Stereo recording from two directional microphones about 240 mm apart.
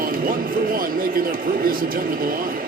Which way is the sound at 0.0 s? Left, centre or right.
Right.